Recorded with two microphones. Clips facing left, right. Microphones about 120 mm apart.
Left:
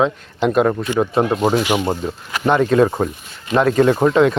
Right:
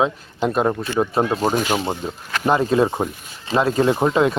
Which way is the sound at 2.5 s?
30° right (ahead or behind).